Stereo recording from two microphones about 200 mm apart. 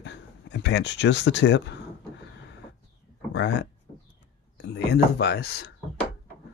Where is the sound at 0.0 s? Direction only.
60° left (ahead or behind).